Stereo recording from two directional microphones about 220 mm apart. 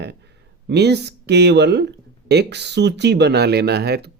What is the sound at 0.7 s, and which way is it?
Speech, 50° right (ahead or behind).